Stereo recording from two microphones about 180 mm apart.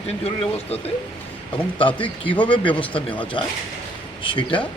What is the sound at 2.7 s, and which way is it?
Speech, 5° left (ahead or behind).